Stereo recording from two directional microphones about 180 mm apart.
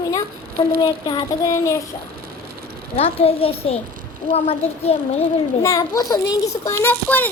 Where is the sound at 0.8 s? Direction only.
25° left (ahead or behind).